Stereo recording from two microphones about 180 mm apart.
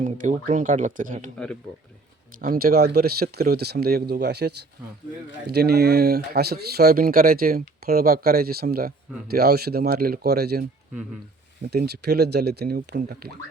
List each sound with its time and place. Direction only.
0.0 s speech: 45° right (ahead or behind)
2.4 s speech: 55° right (ahead or behind)
11.7 s speech: 65° right (ahead or behind)